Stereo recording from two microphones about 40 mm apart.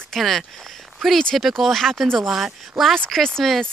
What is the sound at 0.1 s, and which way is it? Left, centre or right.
Speech, centre.